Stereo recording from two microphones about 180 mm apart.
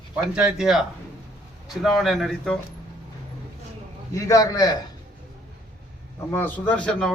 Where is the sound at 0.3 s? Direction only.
5° right (ahead or behind).